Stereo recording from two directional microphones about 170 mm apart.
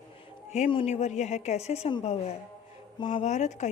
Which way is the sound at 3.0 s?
45° left (ahead or behind).